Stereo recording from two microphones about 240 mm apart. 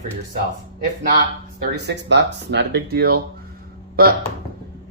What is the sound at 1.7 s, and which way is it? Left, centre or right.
A man's voice, right.